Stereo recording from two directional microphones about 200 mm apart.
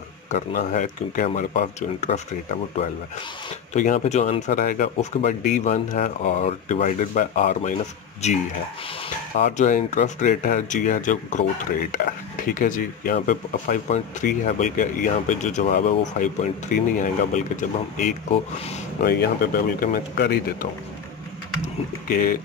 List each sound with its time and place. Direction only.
0.3 s speech: 40° left (ahead or behind)
3.7 s speech: 35° left (ahead or behind)
9.4 s speech: 40° left (ahead or behind)
19.0 s speech: 50° left (ahead or behind)
22.0 s speech: 45° left (ahead or behind)